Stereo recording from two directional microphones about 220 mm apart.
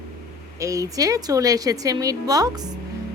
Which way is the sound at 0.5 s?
15° right (ahead or behind).